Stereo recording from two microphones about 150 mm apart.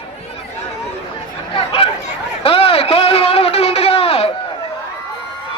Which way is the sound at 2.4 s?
40° left (ahead or behind).